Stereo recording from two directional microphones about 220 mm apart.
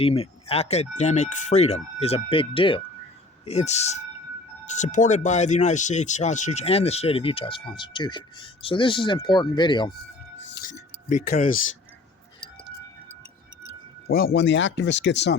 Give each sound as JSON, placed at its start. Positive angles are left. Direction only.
{"t": 0.0, "sound": "speech", "side_deg": 25}
{"t": 10.5, "sound": "speech", "side_deg": 35}
{"t": 14.1, "sound": "speech", "side_deg": 45}